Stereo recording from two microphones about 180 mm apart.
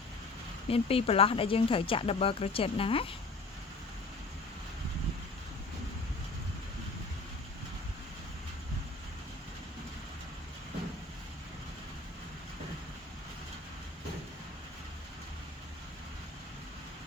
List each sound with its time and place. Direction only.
0.7 s speech: 35° left (ahead or behind)